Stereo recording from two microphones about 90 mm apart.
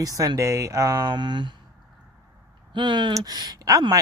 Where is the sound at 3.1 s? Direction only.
40° right (ahead or behind).